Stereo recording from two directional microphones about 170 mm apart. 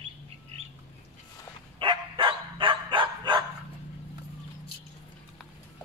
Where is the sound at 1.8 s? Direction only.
30° right (ahead or behind).